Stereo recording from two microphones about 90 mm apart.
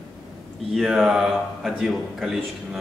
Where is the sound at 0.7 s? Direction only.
5° right (ahead or behind).